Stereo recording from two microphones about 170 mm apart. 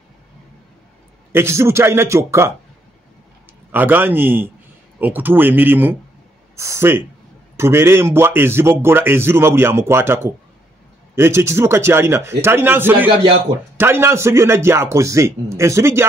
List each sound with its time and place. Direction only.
1.3 s a man's voice: 15° right (ahead or behind)
3.7 s a man's voice: 10° right (ahead or behind)